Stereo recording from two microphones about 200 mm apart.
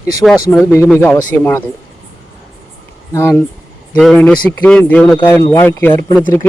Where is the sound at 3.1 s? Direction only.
10° left (ahead or behind).